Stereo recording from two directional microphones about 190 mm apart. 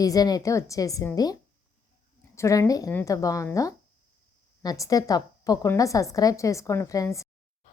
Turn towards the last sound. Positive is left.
turn(degrees=15)  # may be behind; listen again after turning